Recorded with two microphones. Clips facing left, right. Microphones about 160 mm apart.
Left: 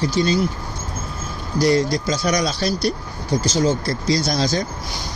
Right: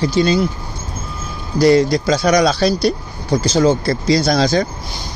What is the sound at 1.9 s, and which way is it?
Speech, 65° right (ahead or behind).